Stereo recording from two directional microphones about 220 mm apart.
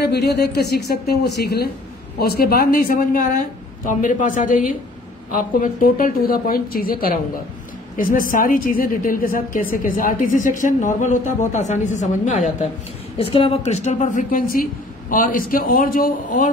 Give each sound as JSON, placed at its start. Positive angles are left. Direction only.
{"t": 0.0, "sound": "a woman's voice", "side_deg": 50}